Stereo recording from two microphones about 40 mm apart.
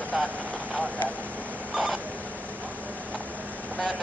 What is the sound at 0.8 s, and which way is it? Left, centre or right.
Vehicle, left.